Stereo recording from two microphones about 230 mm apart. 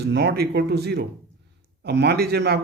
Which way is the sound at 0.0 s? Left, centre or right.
Right.